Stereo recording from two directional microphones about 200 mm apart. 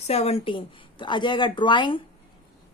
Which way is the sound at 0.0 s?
30° left (ahead or behind).